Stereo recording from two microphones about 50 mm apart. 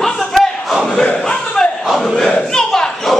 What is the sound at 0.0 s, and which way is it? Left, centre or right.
Battle cry, centre.